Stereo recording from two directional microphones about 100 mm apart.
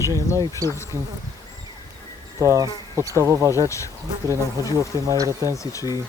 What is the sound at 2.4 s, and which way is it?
Speech, 35° right (ahead or behind).